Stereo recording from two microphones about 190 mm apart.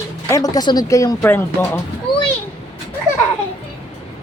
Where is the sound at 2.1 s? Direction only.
55° left (ahead or behind).